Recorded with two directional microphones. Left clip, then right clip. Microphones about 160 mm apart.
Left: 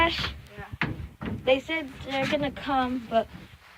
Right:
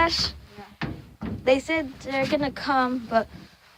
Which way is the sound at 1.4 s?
40° right (ahead or behind).